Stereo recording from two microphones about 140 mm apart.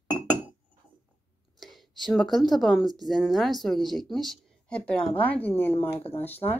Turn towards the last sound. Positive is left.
turn(degrees=15)  # may be behind; listen again after turning